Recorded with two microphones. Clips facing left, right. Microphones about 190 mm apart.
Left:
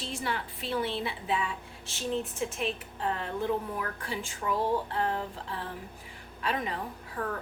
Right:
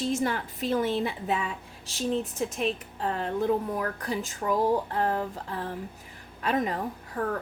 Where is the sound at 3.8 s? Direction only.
40° right (ahead or behind).